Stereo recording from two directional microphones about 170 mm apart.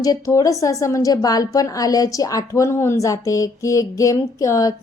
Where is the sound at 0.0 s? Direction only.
20° left (ahead or behind).